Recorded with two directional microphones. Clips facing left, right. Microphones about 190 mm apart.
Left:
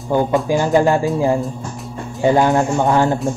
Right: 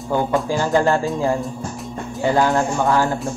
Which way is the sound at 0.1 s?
15° left (ahead or behind).